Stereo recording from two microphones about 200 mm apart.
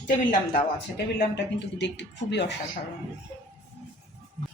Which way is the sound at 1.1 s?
60° left (ahead or behind).